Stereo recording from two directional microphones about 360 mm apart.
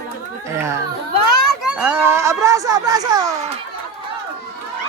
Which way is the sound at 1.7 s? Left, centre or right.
Centre.